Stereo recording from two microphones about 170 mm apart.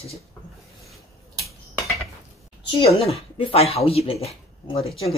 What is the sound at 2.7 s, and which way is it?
A woman's voice, 30° left (ahead or behind).